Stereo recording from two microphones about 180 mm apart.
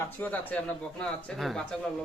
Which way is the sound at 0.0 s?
10° left (ahead or behind).